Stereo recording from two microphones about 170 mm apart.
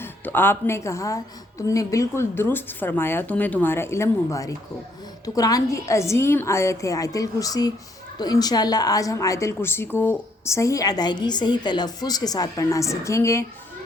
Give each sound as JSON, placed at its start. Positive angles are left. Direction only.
{"t": 0.0, "sound": "a woman's voice", "side_deg": 10}